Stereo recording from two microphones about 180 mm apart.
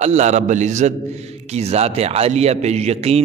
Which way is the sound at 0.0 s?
40° right (ahead or behind).